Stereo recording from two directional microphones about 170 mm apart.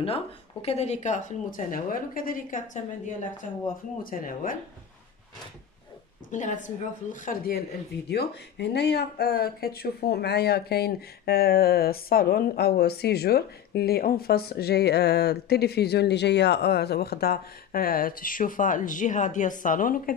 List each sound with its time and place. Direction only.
0.0 s speech: 35° left (ahead or behind); by 2.8 s 50° left (ahead or behind)
4.0 s speech: 55° left (ahead or behind)
6.3 s speech: 45° left (ahead or behind)
8.1 s speech: 75° left (ahead or behind); by 20.2 s 55° left (ahead or behind)